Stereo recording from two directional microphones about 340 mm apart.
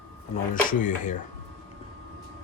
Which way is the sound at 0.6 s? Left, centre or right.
Left.